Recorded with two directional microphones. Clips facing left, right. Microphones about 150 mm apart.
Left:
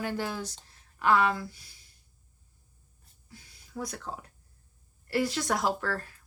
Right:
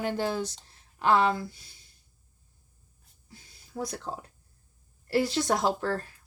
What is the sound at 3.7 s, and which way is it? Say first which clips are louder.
Speech: right 3 dB; 30° right (ahead or behind).